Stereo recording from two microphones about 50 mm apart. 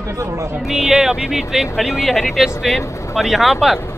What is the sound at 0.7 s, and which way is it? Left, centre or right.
Speech, centre.